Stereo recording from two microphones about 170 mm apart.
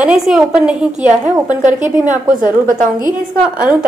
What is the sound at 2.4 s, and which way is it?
Speech, 50° right (ahead or behind).